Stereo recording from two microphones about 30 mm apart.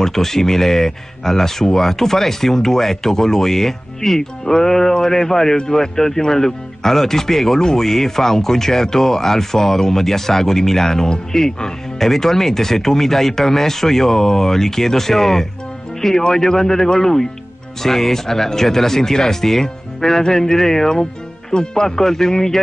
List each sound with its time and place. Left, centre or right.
0.0 s speech: centre